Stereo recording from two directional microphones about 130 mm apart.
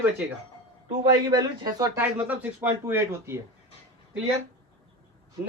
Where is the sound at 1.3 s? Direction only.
30° right (ahead or behind).